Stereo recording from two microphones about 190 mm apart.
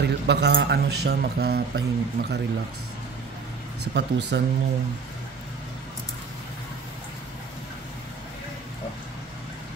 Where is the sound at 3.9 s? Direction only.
65° right (ahead or behind).